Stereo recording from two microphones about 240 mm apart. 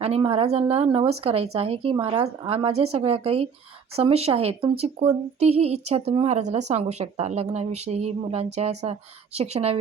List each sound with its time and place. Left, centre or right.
0.0 s speech: right